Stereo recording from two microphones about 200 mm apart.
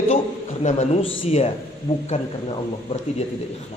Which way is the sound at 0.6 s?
35° left (ahead or behind).